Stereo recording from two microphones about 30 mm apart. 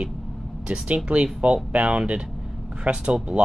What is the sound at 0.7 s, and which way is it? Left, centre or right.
Speech, right.